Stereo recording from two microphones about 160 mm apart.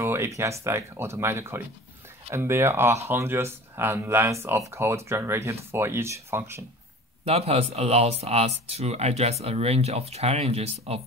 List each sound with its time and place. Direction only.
0.0 s speech: 15° right (ahead or behind)
7.2 s speech: 40° right (ahead or behind)